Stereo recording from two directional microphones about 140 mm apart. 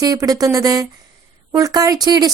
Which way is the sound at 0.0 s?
25° right (ahead or behind).